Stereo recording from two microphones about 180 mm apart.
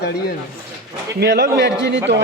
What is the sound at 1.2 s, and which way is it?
Speech, 65° right (ahead or behind).